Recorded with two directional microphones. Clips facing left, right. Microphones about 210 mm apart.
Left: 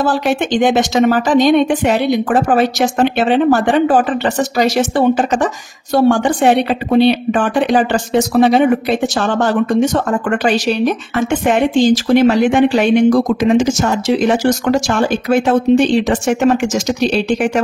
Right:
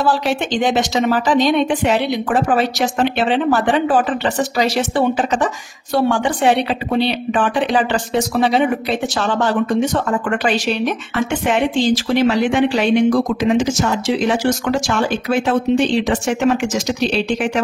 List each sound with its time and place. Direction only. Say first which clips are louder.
0.0 s speech: left 3 dB; 50° left (ahead or behind)